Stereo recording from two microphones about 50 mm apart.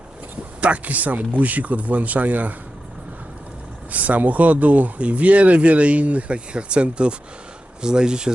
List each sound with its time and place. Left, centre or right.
0.6 s speech: right
3.9 s speech: right